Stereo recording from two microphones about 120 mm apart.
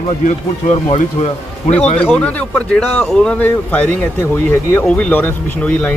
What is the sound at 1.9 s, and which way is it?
Speech, 10° left (ahead or behind).